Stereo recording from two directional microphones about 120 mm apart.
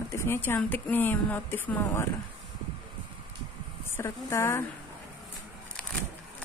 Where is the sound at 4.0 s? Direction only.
20° left (ahead or behind).